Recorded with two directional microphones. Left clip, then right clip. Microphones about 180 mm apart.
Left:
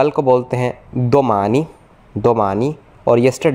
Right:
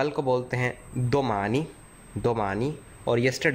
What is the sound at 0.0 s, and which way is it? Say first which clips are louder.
Speech: left 12 dB; 15° left (ahead or behind).